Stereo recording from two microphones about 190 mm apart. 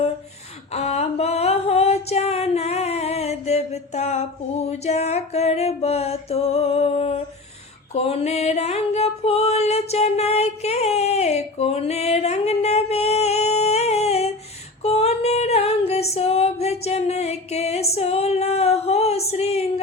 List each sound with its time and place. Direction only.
0.7 s a sound: 35° left (ahead or behind)
7.9 s music: 30° left (ahead or behind)
14.8 s female singing: 35° left (ahead or behind)